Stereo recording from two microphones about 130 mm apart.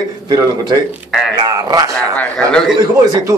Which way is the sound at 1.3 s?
30° right (ahead or behind).